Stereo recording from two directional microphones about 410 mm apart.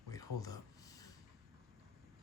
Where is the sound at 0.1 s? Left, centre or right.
Centre.